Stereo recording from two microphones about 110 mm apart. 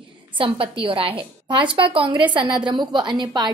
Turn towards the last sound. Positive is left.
turn(degrees=-45)  # may be behind; listen again after turning